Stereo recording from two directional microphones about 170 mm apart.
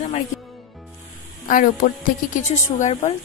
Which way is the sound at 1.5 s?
50° left (ahead or behind).